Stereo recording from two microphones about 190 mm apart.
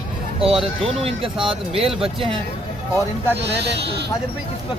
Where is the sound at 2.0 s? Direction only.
30° right (ahead or behind).